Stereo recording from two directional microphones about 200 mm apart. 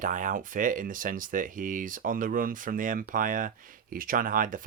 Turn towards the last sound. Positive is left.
turn(degrees=-45)  # may be behind; listen again after turning